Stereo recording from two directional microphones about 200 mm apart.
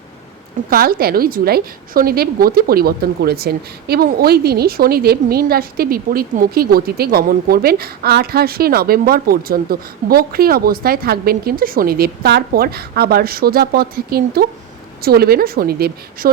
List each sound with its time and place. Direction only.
0.7 s a woman's voice: 45° right (ahead or behind)